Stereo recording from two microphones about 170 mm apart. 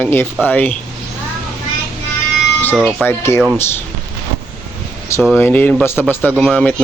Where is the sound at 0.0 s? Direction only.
10° left (ahead or behind).